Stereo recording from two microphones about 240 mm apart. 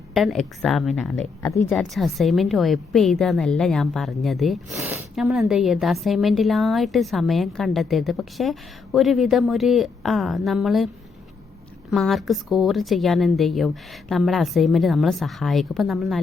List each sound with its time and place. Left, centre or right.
0.1 s a woman's voice: centre
11.9 s a woman's voice: centre